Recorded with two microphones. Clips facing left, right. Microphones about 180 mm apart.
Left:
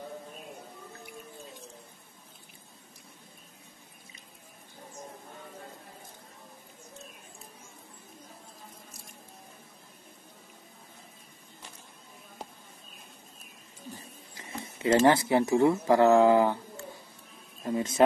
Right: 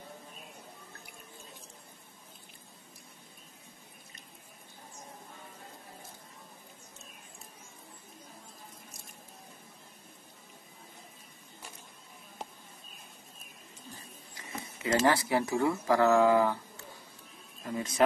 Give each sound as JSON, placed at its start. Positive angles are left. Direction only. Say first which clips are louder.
{"t": 14.6, "sound": "speech", "louder": "left 5 dB", "side_deg": 25}
{"t": 17.6, "sound": "speech", "louder": "left 5 dB", "side_deg": 25}